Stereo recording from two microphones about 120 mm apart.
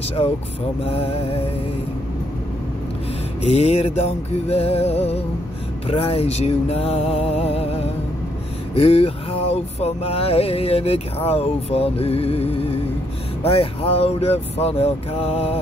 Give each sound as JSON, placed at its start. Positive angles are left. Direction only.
{"t": 0.2, "sound": "music", "side_deg": 55}
{"t": 3.4, "sound": "vehicle", "side_deg": 65}
{"t": 5.9, "sound": "vehicle", "side_deg": 50}